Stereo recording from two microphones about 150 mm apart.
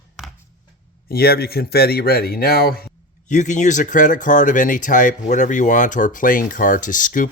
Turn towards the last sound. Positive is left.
turn(degrees=60)  # may be behind; listen again after turning